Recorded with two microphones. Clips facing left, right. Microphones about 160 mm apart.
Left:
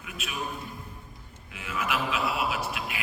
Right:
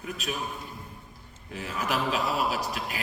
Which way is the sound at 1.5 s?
40° right (ahead or behind).